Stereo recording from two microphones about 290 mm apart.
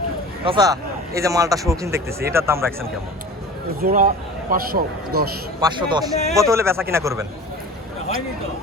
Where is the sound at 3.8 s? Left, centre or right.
Right.